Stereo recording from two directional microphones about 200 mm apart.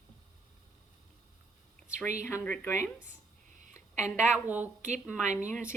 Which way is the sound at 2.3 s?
10° left (ahead or behind).